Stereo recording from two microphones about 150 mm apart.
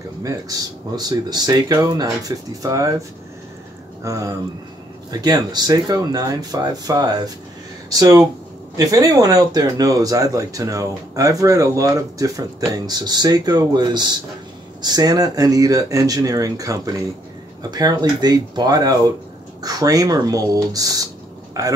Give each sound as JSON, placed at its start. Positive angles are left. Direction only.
{"t": 0.2, "sound": "speech", "side_deg": -25}